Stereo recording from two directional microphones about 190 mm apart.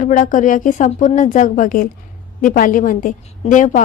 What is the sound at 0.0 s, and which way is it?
A woman's voice, 45° left (ahead or behind).